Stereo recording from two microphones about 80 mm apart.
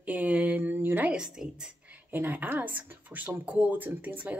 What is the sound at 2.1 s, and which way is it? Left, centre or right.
Speech, right.